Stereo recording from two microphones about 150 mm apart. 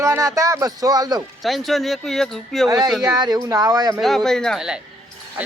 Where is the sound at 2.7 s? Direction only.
25° right (ahead or behind).